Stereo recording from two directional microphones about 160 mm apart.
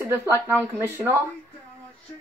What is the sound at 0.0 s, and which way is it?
Speech, 15° right (ahead or behind).